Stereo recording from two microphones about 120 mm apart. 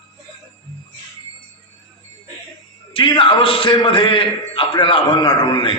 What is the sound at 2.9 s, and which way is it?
A man's voice, 45° left (ahead or behind).